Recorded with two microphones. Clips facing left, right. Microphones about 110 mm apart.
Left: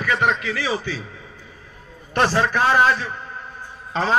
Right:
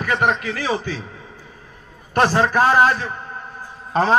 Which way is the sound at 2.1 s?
45° right (ahead or behind).